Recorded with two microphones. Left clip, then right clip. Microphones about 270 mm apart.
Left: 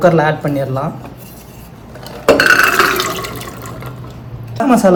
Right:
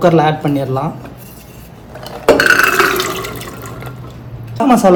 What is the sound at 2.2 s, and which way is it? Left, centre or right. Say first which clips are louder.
Water: even; centre.